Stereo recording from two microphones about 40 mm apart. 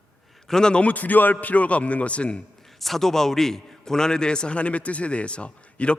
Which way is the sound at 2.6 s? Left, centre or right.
Centre.